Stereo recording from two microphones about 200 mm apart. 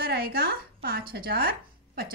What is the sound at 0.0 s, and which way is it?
A woman's voice, 50° right (ahead or behind).